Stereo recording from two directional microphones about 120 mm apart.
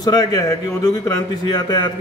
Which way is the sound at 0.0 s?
35° left (ahead or behind).